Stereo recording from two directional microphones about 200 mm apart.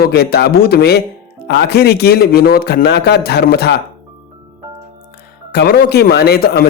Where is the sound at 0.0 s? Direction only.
50° left (ahead or behind).